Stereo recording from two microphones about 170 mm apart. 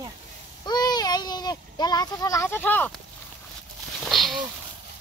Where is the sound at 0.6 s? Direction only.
25° left (ahead or behind).